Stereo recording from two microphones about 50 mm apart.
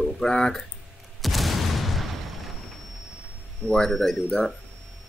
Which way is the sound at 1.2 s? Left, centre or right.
Centre.